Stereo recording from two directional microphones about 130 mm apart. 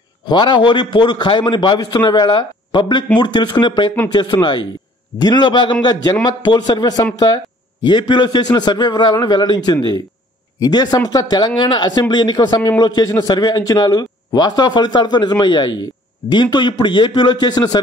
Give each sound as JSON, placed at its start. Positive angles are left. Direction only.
{"t": 0.2, "sound": "speech", "side_deg": 35}